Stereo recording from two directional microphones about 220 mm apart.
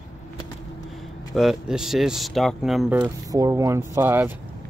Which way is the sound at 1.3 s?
Centre (ahead or behind).